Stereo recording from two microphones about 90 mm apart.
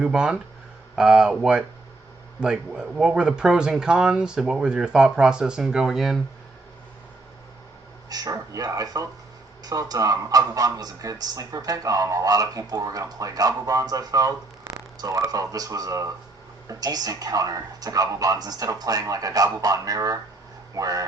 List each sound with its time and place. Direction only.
0.0 s speech: 10° right (ahead or behind)
8.1 s a woman's voice: 40° right (ahead or behind)